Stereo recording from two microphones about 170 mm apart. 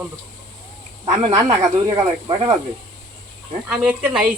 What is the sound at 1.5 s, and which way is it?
Speech, 20° right (ahead or behind).